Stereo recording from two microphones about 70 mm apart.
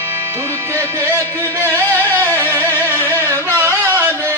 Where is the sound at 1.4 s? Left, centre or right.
Left.